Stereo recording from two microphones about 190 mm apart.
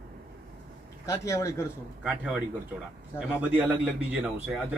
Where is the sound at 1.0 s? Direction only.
15° left (ahead or behind).